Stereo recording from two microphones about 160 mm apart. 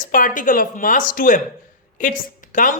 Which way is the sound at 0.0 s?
55° left (ahead or behind).